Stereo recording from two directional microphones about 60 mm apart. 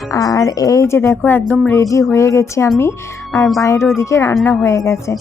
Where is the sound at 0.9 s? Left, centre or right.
Left.